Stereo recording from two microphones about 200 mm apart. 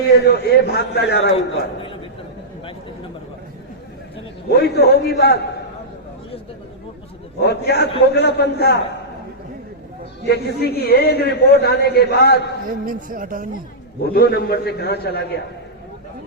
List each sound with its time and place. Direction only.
0.1 s a man's voice: 55° left (ahead or behind)
4.4 s a man's voice: 55° left (ahead or behind)
7.3 s a man's voice: 55° left (ahead or behind)
10.2 s a man's voice: 55° left (ahead or behind)
12.6 s speech: 45° right (ahead or behind)
14.0 s a man's voice: 50° left (ahead or behind)